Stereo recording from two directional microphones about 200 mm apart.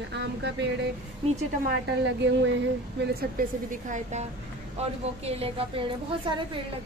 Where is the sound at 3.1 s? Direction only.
45° right (ahead or behind); by 6.4 s 25° right (ahead or behind).